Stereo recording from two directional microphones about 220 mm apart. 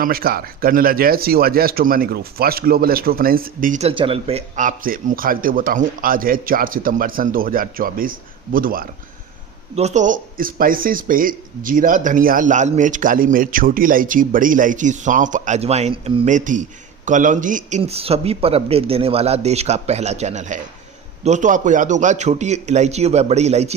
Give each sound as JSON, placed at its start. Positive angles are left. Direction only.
{"t": 0.0, "sound": "speech", "side_deg": -40}